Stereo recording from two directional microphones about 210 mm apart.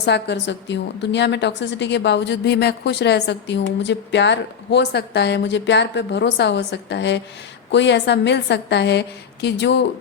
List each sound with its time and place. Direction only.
0.0 s a woman's voice: 55° left (ahead or behind)